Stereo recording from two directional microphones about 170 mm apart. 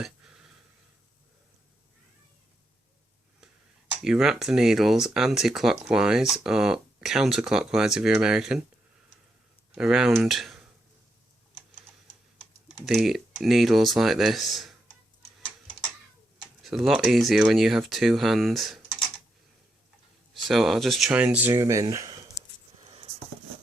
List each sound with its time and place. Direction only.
0.0 s a sound: 5° right (ahead or behind)
4.0 s speech: 5° right (ahead or behind)
9.7 s speech: 5° right (ahead or behind)
12.6 s speech: centre (ahead or behind)
16.6 s speech: centre (ahead or behind)
20.3 s speech: centre (ahead or behind); by 22.2 s 20° right (ahead or behind)
22.8 s a sound: 35° right (ahead or behind)